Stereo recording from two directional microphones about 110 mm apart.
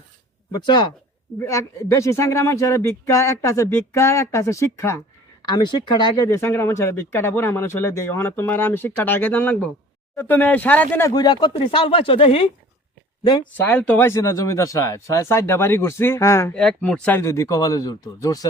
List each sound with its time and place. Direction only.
0.6 s speech: 45° left (ahead or behind)
1.4 s speech: 25° left (ahead or behind)
5.4 s speech: 40° left (ahead or behind)
6.1 s speech: 25° left (ahead or behind)
11.1 s speech: 40° left (ahead or behind)
11.5 s speech: 55° left (ahead or behind)
13.2 s speech: 40° left (ahead or behind)
13.5 s speech: 15° left (ahead or behind)
14.1 s speech: 25° left (ahead or behind)
16.5 s speech: 5° left (ahead or behind)
17.2 s speech: 25° left (ahead or behind)